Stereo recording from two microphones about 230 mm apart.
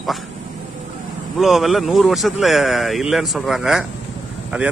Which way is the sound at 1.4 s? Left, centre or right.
Centre.